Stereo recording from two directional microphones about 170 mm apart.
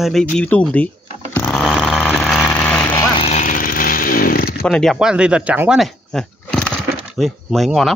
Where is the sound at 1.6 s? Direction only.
Centre (ahead or behind).